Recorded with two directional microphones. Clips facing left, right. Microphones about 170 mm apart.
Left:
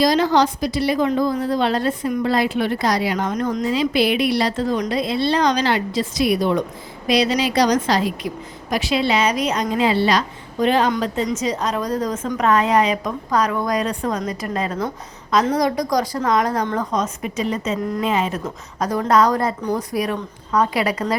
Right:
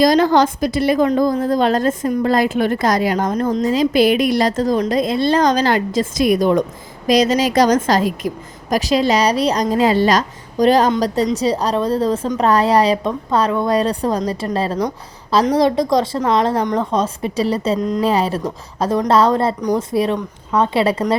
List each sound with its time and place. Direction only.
0.0 s a woman's voice: 50° right (ahead or behind)
3.3 s a woman's voice: 30° right (ahead or behind)
17.7 s a woman's voice: 20° right (ahead or behind)
18.0 s a woman's voice: 35° right (ahead or behind)